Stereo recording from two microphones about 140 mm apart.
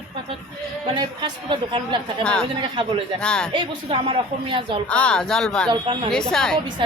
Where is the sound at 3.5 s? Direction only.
40° right (ahead or behind).